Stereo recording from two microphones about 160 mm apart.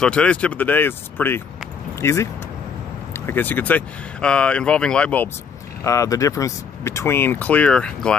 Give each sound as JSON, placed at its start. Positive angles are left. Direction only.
{"t": 0.0, "sound": "speech", "side_deg": 5}
{"t": 5.9, "sound": "speech", "side_deg": 20}